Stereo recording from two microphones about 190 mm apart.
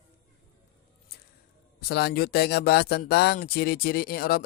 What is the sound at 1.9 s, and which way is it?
A man's voice, 60° left (ahead or behind).